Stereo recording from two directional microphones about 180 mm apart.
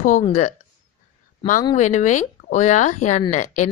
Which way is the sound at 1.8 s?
40° left (ahead or behind).